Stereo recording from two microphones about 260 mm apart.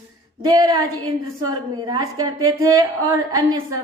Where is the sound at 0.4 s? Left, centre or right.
Centre.